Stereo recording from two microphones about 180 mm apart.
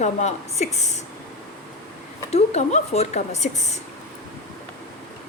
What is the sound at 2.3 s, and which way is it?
A woman's voice, 35° left (ahead or behind).